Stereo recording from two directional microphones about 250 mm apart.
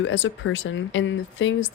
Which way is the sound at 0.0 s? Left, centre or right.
Left.